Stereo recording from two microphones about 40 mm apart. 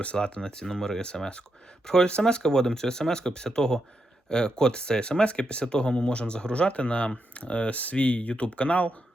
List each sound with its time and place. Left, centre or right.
0.0 s speech: left